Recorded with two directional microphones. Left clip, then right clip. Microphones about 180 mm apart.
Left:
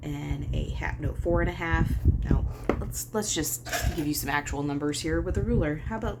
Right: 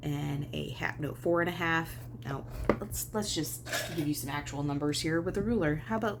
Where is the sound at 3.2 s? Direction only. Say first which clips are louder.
Left 5 dB; 15° left (ahead or behind); by 6.2 s 25° right (ahead or behind).